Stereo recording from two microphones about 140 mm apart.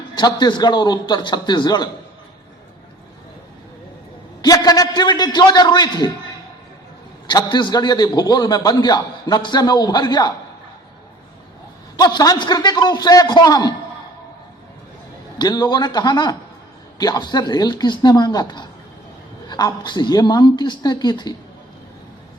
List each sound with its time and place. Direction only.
0.2 s a woman's voice: 30° left (ahead or behind)
4.4 s a woman's voice: 25° left (ahead or behind)
7.3 s a man's voice: 30° left (ahead or behind)
11.9 s a man's voice: 30° left (ahead or behind)
15.4 s a woman's voice: 30° left (ahead or behind)